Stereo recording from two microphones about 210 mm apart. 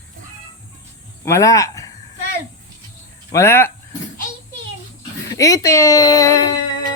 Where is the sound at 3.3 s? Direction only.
15° left (ahead or behind).